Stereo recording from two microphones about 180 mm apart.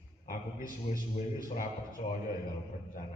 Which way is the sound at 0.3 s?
45° left (ahead or behind).